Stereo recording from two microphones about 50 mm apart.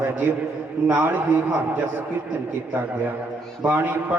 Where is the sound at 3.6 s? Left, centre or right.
Right.